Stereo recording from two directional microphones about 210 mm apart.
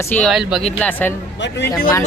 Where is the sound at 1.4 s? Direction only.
55° left (ahead or behind).